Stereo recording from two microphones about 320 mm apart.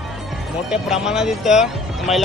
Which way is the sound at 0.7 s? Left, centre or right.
Centre.